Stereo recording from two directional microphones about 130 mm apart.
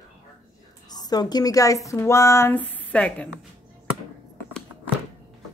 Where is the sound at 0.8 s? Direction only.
30° left (ahead or behind); by 3.3 s 10° left (ahead or behind).